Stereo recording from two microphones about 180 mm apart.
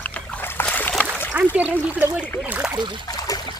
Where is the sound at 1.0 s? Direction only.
10° right (ahead or behind).